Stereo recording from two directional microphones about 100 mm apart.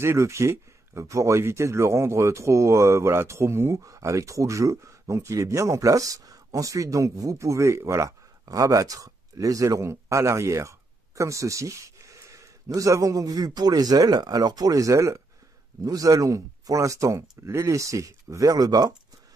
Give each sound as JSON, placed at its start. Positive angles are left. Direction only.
{"t": 0.0, "sound": "speech", "side_deg": -25}